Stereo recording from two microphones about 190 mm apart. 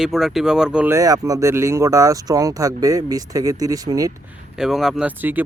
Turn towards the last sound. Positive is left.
turn(degrees=-10)  # may be behind; listen again after turning